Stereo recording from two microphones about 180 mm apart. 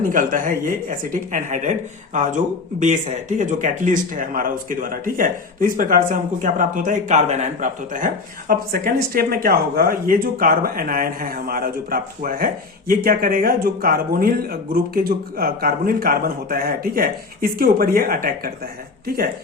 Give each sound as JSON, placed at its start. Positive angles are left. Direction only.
{"t": 0.0, "sound": "speech", "side_deg": -50}